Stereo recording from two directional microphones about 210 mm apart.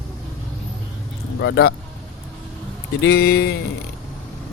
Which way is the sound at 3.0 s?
50° left (ahead or behind).